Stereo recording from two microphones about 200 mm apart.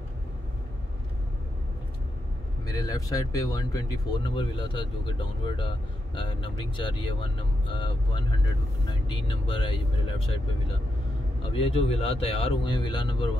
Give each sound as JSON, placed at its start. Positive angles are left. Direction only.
{"t": 2.6, "sound": "speech", "side_deg": 20}
{"t": 11.5, "sound": "speech", "side_deg": 30}